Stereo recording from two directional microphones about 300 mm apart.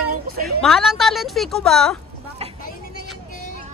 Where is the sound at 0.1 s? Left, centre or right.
Right.